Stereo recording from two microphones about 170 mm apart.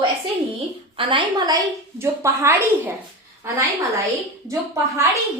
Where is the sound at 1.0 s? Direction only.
30° right (ahead or behind).